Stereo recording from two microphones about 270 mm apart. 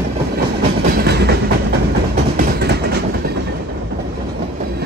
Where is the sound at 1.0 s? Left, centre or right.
Right.